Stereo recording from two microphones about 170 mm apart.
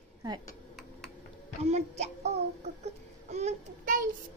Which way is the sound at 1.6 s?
40° right (ahead or behind).